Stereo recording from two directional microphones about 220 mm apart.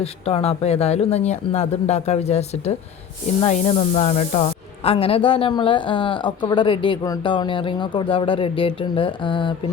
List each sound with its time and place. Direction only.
0.0 s speech: 25° left (ahead or behind)